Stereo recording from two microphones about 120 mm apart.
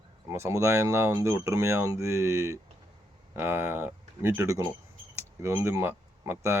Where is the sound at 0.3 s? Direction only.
20° right (ahead or behind).